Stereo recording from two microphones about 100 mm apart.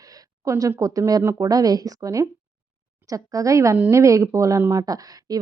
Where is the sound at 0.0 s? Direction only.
35° right (ahead or behind).